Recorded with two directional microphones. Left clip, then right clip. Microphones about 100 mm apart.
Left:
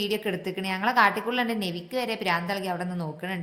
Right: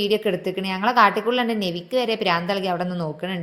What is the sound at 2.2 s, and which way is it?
Speech, 45° right (ahead or behind).